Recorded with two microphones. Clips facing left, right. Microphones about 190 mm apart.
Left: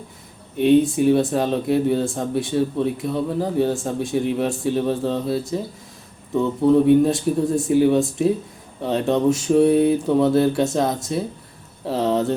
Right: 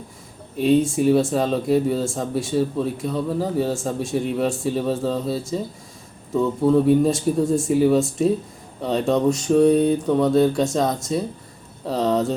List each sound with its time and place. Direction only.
0.5 s speech: centre (ahead or behind)